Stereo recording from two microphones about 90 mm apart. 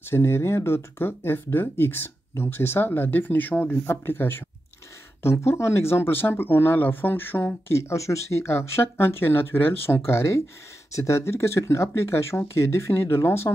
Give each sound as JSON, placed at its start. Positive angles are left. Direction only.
{"t": 0.1, "sound": "speech", "side_deg": 30}